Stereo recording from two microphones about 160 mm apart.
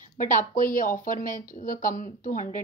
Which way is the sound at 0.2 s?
55° left (ahead or behind).